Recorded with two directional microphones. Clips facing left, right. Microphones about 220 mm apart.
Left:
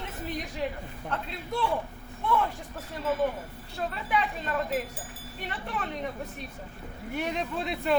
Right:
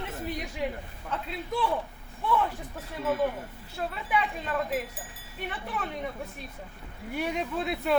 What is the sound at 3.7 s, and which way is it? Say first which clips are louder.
Speech: even; 5° right (ahead or behind).